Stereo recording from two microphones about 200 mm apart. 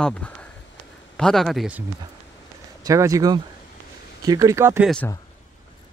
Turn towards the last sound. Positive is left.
turn(degrees=-10)  # may be behind; listen again after turning